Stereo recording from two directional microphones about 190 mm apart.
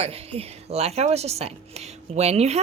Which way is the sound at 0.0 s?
30° right (ahead or behind).